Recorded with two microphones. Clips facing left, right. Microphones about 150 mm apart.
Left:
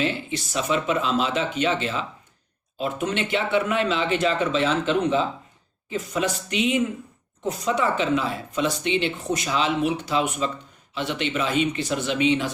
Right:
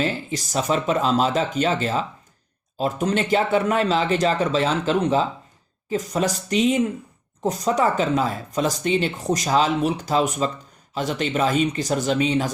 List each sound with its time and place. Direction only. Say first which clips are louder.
0.0 s speech: right 1 dB; 40° right (ahead or behind)